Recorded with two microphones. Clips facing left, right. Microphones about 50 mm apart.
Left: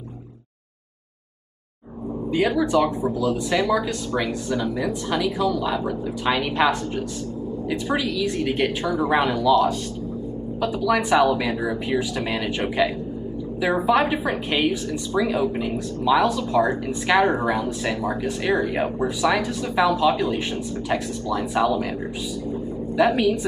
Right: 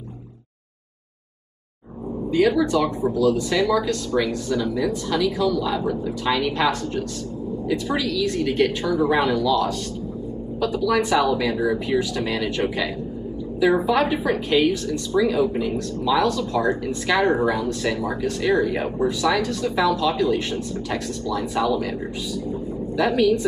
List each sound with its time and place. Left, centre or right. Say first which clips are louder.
2.3 s a woman's voice: right 1 dB; centre
10.6 s a woman's voice: right 1 dB; centre
22.9 s a woman's voice: even; centre